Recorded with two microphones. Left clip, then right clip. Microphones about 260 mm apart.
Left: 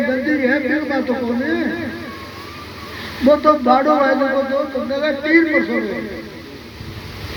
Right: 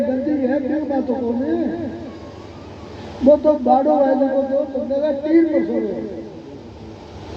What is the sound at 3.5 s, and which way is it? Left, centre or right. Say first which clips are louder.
Speech: left 2 dB; left.